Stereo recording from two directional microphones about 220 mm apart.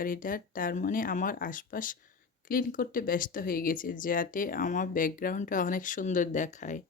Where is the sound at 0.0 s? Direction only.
40° left (ahead or behind).